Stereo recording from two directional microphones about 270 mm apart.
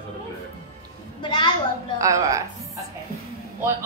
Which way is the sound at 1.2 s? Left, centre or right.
Centre.